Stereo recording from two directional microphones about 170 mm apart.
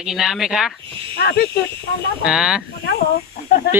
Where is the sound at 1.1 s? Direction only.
75° left (ahead or behind).